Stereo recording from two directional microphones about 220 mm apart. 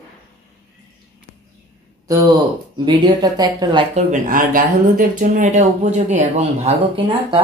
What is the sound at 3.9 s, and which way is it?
Speech, 35° right (ahead or behind).